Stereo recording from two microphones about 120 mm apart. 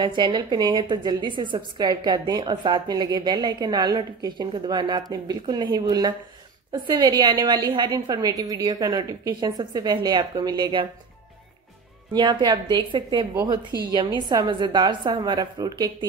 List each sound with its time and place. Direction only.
0.0 s a woman's voice: 40° right (ahead or behind)
12.1 s a woman's voice: 40° right (ahead or behind)
13.3 s a woman's voice: 30° right (ahead or behind)